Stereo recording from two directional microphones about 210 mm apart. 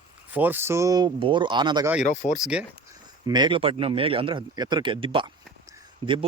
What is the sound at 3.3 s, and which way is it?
Speech, 20° right (ahead or behind).